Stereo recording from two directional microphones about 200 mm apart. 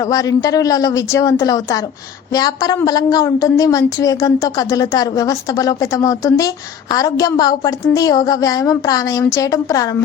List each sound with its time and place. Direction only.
0.0 s a woman's voice: 20° left (ahead or behind)